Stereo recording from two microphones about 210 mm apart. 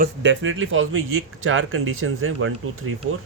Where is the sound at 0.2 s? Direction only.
65° right (ahead or behind).